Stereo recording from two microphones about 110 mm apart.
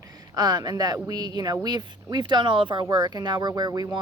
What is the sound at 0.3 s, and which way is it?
Speech, 40° right (ahead or behind).